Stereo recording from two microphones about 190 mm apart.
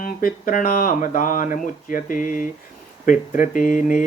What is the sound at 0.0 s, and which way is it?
Mantra, 45° left (ahead or behind).